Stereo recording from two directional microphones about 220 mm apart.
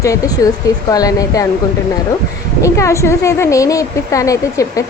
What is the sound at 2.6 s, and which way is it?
A woman's voice, 15° left (ahead or behind).